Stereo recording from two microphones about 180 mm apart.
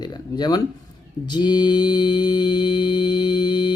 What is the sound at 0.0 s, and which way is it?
Speech, 25° left (ahead or behind).